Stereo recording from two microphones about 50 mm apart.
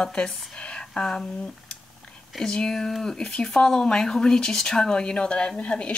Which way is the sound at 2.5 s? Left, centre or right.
Centre.